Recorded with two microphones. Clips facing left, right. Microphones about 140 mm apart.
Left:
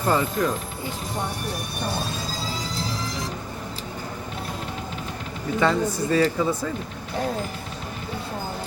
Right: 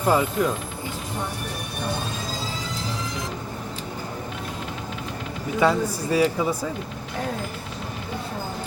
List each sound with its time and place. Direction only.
0.0 s a man's voice: 10° right (ahead or behind)
2.7 s music: 35° left (ahead or behind)
5.5 s a man's voice: 10° right (ahead or behind)